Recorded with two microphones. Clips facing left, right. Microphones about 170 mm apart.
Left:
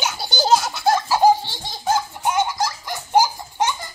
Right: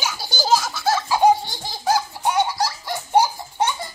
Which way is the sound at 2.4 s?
30° right (ahead or behind).